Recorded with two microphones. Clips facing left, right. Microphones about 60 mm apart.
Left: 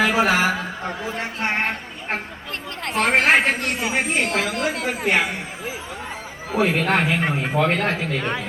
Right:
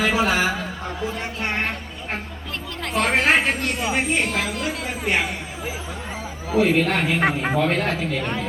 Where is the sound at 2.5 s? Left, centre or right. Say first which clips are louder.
Even; left.